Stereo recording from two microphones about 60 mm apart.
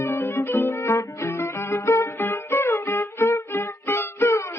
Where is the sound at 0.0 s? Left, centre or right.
Left.